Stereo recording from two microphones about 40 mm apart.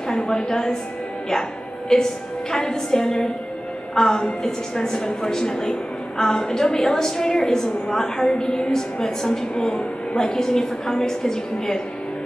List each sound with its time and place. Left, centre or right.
0.1 s a woman's voice: left
1.9 s a woman's voice: centre